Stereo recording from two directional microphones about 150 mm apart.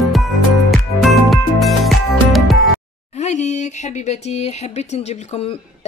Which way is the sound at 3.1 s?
50° left (ahead or behind).